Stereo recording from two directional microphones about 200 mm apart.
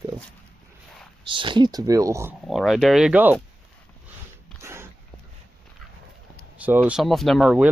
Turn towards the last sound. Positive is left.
turn(degrees=-5)  # may be behind; listen again after turning